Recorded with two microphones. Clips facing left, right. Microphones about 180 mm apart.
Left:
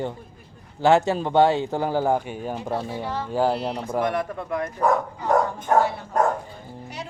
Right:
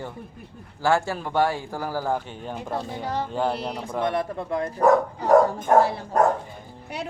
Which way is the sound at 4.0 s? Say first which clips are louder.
Even; 30° right (ahead or behind).